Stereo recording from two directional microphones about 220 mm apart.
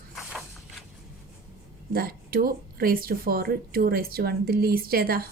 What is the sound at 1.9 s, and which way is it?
Speech, 40° right (ahead or behind).